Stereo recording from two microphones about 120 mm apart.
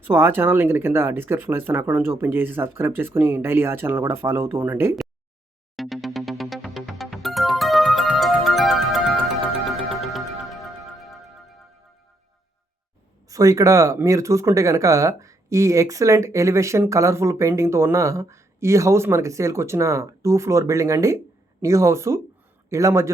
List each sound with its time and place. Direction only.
0.1 s speech: 20° right (ahead or behind)
5.7 s music: centre (ahead or behind)
13.2 s speech: 30° right (ahead or behind)